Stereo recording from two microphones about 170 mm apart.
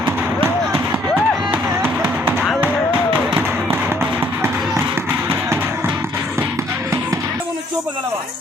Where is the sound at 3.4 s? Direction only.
10° right (ahead or behind).